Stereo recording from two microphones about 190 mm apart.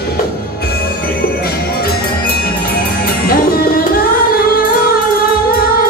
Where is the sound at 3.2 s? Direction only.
50° left (ahead or behind).